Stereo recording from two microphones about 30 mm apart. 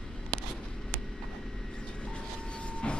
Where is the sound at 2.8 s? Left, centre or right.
Left.